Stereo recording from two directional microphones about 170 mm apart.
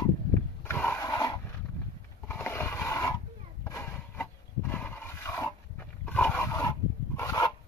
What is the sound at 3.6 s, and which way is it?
Wild animals, 15° left (ahead or behind).